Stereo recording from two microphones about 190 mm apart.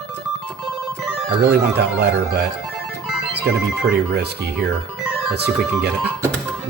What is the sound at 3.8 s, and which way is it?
Speech, 60° right (ahead or behind).